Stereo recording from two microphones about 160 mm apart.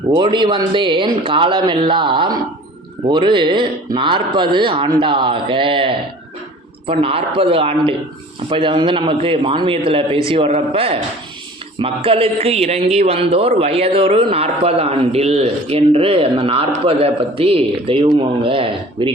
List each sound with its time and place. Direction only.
0.1 s a man's voice: 30° right (ahead or behind)